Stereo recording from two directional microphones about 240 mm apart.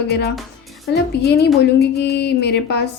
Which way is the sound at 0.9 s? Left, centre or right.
Left.